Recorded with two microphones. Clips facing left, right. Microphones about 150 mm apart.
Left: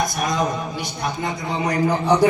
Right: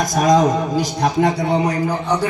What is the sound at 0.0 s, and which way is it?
A man's voice, 90° right.